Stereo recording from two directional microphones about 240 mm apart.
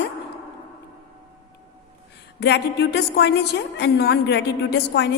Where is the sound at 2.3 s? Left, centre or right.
Left.